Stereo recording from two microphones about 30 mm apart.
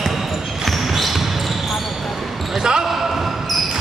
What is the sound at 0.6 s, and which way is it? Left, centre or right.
Basketball bounce, centre.